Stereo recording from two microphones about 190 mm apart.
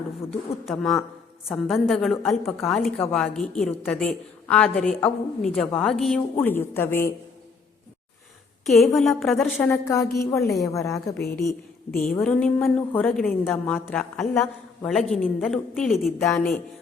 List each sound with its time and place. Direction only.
0.3 s a woman's voice: centre (ahead or behind)
6.4 s a woman's voice: 10° left (ahead or behind)
8.6 s a woman's voice: centre (ahead or behind)
9.6 s a woman's voice: 15° left (ahead or behind)
11.9 s a woman's voice: 50° left (ahead or behind)
12.2 s a woman's voice: 5° left (ahead or behind)
16.1 s a woman's voice: 15° left (ahead or behind)